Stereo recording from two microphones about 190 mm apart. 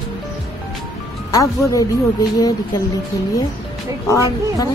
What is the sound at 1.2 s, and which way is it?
A woman's voice, 20° left (ahead or behind).